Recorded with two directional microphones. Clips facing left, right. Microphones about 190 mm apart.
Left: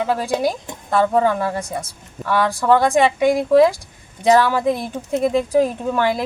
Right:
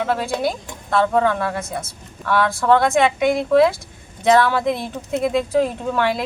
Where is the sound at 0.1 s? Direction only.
15° left (ahead or behind).